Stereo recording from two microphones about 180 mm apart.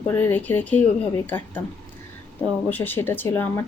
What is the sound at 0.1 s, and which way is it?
Speech, 10° left (ahead or behind).